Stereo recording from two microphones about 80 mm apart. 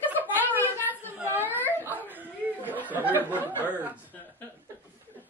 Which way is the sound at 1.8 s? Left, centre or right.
Right.